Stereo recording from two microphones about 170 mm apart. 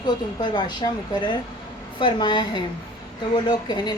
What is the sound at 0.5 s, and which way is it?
A woman's voice, 25° left (ahead or behind).